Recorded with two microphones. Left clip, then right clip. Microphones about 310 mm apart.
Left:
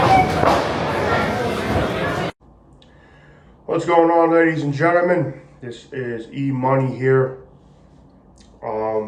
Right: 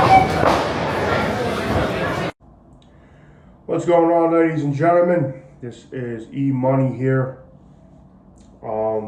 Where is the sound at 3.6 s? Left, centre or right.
Centre.